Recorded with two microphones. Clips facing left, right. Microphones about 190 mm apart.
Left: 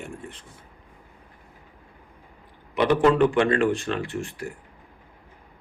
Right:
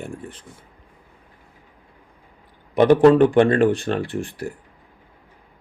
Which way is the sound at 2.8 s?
40° right (ahead or behind).